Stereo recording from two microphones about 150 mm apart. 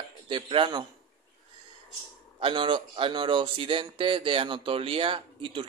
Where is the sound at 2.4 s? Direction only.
35° right (ahead or behind).